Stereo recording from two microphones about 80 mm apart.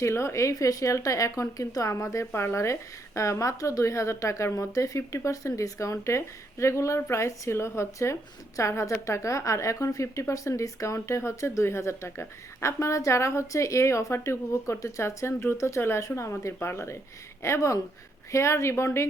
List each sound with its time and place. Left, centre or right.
0.0 s speech: left